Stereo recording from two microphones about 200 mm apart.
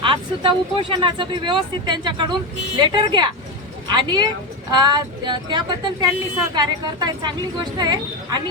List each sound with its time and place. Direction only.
0.0 s speech: 25° right (ahead or behind)